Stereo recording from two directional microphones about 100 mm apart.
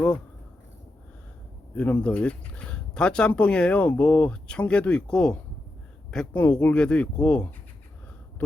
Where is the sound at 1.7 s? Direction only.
15° left (ahead or behind).